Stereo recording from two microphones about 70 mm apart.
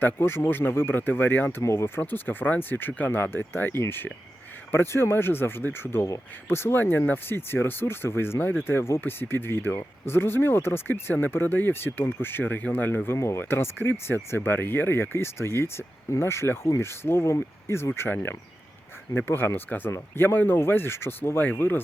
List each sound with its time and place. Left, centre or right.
0.0 s speech: left
1.6 s speech: left
2.0 s speech: left
13.1 s speech: left